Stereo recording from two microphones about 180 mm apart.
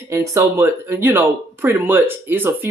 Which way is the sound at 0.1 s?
15° right (ahead or behind).